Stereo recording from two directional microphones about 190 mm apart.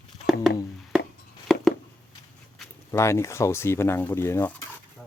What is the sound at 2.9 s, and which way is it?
Speech, 15° left (ahead or behind).